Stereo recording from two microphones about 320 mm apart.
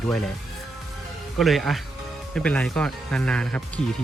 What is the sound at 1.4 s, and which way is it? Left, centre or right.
Speech, centre.